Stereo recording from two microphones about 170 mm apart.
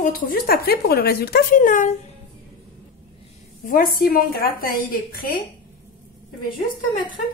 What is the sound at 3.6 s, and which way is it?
A woman's voice, 55° left (ahead or behind).